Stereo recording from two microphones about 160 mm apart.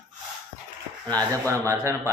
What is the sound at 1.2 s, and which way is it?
Speech, 20° right (ahead or behind).